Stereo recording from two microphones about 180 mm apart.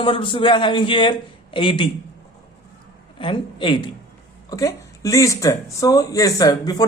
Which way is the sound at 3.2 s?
30° left (ahead or behind).